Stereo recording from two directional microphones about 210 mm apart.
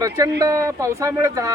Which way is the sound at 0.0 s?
15° right (ahead or behind).